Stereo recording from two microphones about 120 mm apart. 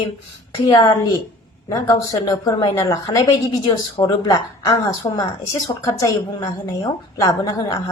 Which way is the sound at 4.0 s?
45° left (ahead or behind).